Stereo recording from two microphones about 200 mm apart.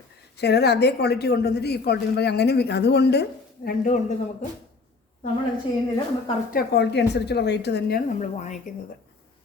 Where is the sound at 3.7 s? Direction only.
40° left (ahead or behind).